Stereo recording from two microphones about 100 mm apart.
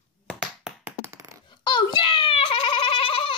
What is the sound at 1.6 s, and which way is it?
Goat, 50° left (ahead or behind).